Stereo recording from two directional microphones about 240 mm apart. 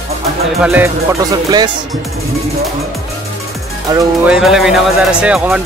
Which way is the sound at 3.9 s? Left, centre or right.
Centre.